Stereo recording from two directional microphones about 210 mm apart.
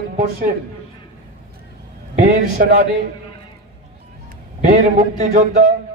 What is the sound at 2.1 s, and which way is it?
Speech, 45° right (ahead or behind).